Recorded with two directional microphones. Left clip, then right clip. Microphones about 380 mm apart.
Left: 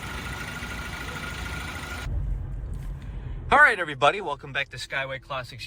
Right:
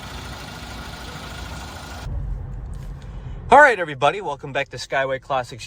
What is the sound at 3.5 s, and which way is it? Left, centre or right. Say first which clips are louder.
Speech: right 6 dB; centre.